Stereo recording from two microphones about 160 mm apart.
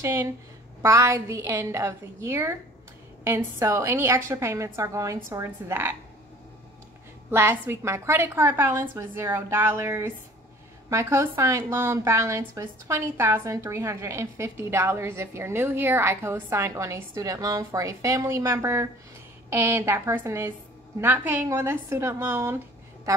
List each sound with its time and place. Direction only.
0.0 s a woman's voice: 15° right (ahead or behind)
7.2 s a woman's voice: 15° right (ahead or behind)